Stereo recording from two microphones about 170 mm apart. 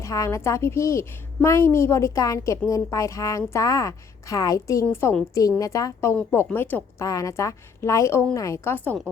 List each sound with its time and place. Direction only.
0.0 s a woman's voice: 20° left (ahead or behind)